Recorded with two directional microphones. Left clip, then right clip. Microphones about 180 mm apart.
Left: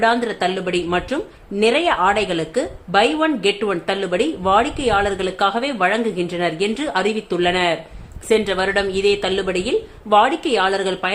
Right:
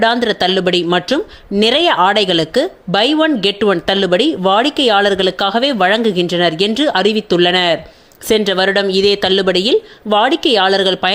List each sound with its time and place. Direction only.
0.0 s speech: 35° right (ahead or behind)